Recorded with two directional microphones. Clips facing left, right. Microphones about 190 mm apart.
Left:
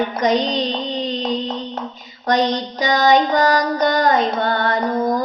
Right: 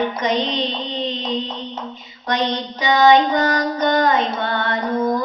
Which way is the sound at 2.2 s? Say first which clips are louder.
Left 4 dB; 40° left (ahead or behind).